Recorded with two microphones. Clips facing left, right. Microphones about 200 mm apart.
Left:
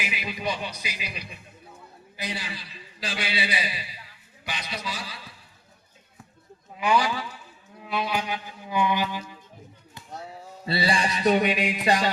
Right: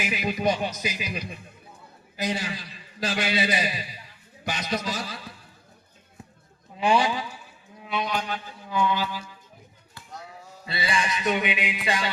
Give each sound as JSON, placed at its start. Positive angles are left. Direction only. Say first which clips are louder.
{"t": 0.1, "sound": "a man's voice", "louder": "right 9 dB", "side_deg": -45}
{"t": 6.7, "sound": "a man's voice", "louder": "right 1 dB", "side_deg": -30}
{"t": 7.8, "sound": "music", "louder": "even", "side_deg": 0}
{"t": 10.7, "sound": "music", "louder": "left 3 dB", "side_deg": 35}